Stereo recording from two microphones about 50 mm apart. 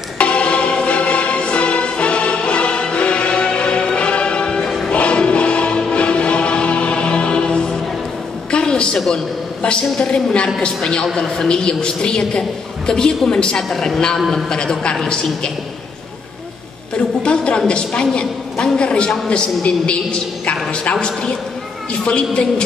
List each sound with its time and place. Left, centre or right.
0.2 s music: left
4.6 s music: centre
4.9 s music: left
8.5 s a sound: centre
9.9 s a woman's voice: centre
16.9 s a woman's voice: centre